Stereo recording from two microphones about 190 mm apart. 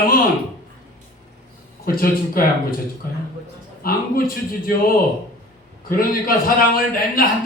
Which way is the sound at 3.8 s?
50° left (ahead or behind).